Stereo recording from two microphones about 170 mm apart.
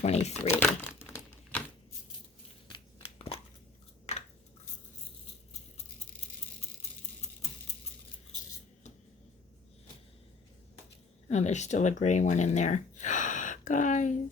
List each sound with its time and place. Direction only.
0.0 s speech: 40° left (ahead or behind)
0.5 s speech: 10° left (ahead or behind)
1.0 s crumpling: 10° left (ahead or behind)
2.6 s a sound: 30° left (ahead or behind)
11.3 s speech: 40° left (ahead or behind)